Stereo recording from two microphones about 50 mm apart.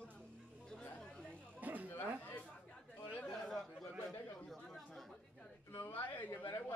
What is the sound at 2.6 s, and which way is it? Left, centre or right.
Chatter, left.